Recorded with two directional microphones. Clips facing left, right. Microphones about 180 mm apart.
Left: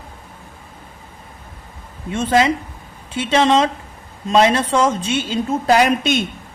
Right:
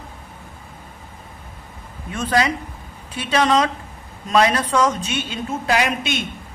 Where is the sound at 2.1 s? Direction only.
25° left (ahead or behind).